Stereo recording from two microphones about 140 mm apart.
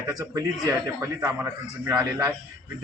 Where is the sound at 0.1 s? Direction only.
25° right (ahead or behind).